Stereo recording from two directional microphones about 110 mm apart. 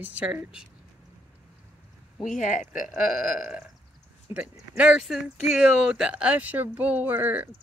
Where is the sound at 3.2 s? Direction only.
5° right (ahead or behind).